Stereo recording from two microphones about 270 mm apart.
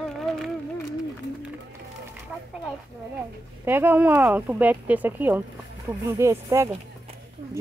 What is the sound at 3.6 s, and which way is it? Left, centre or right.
Speech, centre.